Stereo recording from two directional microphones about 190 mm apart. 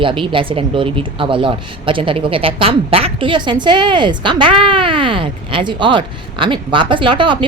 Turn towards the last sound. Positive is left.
turn(degrees=-25)  # may be behind; listen again after turning